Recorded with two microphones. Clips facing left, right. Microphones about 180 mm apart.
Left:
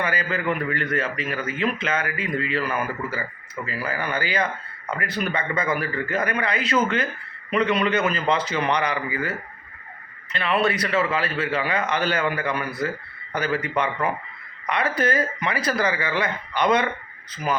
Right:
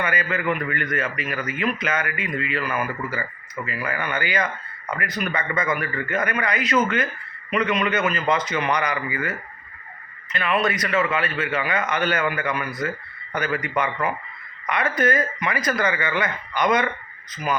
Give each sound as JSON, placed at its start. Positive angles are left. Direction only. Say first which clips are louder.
{"t": 0.0, "sound": "a man's voice", "louder": "right 1 dB", "side_deg": 30}
{"t": 10.3, "sound": "a man's voice", "louder": "left 1 dB", "side_deg": 30}